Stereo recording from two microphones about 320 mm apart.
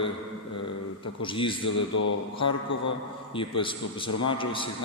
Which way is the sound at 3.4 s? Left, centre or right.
Centre.